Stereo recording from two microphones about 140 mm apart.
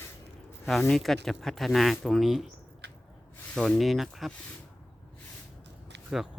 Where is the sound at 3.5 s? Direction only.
Centre (ahead or behind).